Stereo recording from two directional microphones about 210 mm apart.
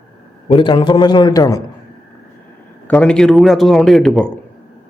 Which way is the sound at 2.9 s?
5° left (ahead or behind).